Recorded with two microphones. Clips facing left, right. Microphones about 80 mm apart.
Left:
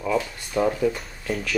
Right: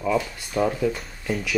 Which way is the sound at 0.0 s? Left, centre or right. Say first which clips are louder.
Right 1 dB; centre.